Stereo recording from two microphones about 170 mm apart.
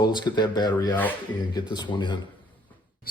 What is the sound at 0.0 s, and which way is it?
Speech, 25° left (ahead or behind).